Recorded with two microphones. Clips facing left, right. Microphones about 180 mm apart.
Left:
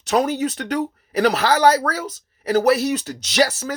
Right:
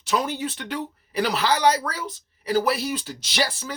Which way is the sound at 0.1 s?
45° left (ahead or behind).